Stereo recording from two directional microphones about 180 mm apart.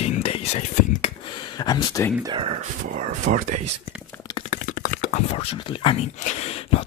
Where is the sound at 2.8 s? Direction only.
45° right (ahead or behind).